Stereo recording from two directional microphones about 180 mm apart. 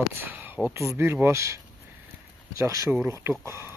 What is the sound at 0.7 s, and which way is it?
Speech, 15° right (ahead or behind).